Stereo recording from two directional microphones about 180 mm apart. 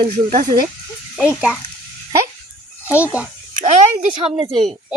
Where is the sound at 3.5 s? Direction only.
45° right (ahead or behind).